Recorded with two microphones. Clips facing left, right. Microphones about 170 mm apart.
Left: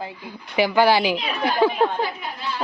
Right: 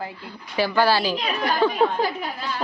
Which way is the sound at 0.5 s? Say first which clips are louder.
Left 3 dB; 15° left (ahead or behind).